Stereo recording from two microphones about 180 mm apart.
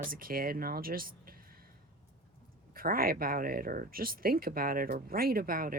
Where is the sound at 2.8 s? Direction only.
55° right (ahead or behind).